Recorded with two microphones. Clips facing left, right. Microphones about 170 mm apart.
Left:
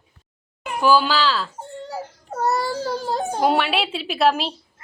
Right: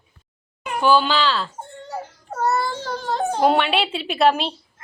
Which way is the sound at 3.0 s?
10° left (ahead or behind).